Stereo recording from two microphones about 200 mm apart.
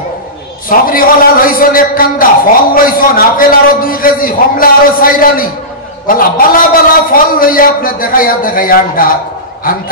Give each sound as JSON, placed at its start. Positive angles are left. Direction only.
{"t": 0.7, "sound": "a man's voice", "side_deg": 45}